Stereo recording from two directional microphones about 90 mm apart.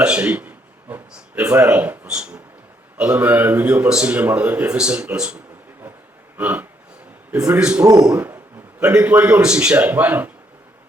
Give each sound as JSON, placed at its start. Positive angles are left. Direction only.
{"t": 0.0, "sound": "a man's voice", "side_deg": -10}
{"t": 6.3, "sound": "a sound", "side_deg": -20}
{"t": 7.6, "sound": "speech", "side_deg": -15}